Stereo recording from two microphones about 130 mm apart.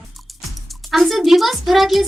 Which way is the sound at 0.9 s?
Centre (ahead or behind).